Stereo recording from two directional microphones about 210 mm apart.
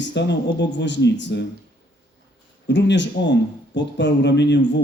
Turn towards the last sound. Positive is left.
turn(degrees=55)  # may be behind; listen again after turning